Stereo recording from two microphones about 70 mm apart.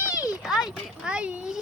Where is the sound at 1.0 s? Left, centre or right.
Centre.